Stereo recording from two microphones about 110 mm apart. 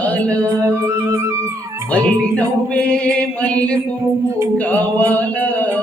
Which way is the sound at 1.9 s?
10° left (ahead or behind).